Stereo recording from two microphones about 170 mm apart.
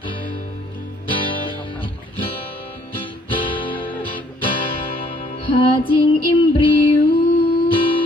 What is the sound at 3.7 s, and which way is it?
Music, 10° left (ahead or behind).